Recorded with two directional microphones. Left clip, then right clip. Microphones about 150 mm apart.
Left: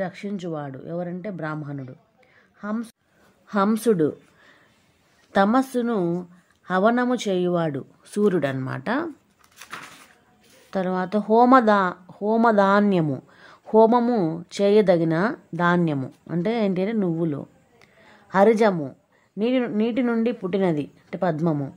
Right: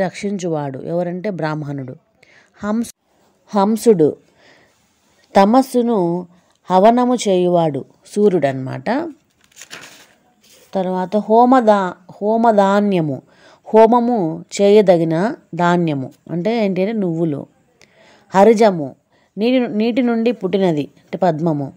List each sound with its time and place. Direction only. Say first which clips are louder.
0.0 s speech: right 9 dB; 40° right (ahead or behind)
3.4 s a woman's voice: right 7 dB; 20° right (ahead or behind)
10.7 s speech: right 6 dB; 10° right (ahead or behind)
13.3 s a sound: right 8 dB; 15° right (ahead or behind)
13.9 s speech: right 5 dB; centre (ahead or behind)
14.3 s a woman's voice: right 9 dB; 20° right (ahead or behind)